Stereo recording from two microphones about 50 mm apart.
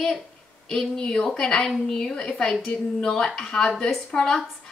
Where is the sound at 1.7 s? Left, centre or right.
Centre.